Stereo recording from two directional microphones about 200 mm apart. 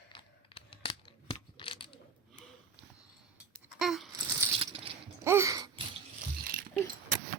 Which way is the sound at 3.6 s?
Centre (ahead or behind).